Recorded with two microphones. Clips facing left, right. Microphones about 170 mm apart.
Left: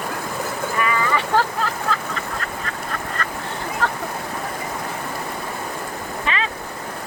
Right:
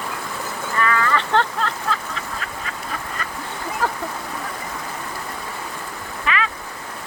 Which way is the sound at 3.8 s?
10° right (ahead or behind).